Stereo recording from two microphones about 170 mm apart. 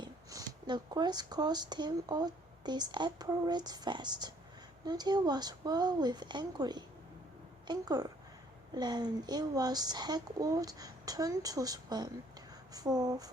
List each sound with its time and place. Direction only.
0.0 s speech: 25° right (ahead or behind)